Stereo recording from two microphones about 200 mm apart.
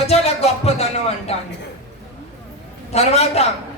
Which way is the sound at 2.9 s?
30° left (ahead or behind).